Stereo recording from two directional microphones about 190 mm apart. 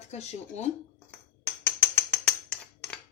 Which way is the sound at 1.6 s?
10° left (ahead or behind).